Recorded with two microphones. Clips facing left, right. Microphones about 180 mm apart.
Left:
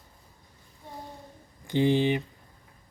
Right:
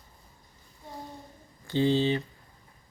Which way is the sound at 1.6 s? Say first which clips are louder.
Left 1 dB; 15° left (ahead or behind).